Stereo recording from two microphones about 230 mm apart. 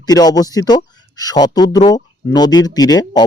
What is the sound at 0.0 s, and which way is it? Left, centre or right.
A man's voice, centre.